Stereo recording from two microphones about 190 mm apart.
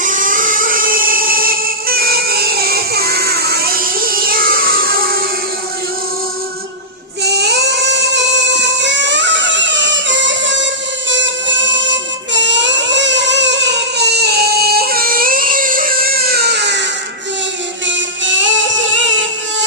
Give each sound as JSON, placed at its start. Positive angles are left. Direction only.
{"t": 0.0, "sound": "music", "side_deg": -45}
{"t": 7.3, "sound": "a sound", "side_deg": -60}
{"t": 11.1, "sound": "music", "side_deg": -75}
{"t": 17.8, "sound": "music", "side_deg": -75}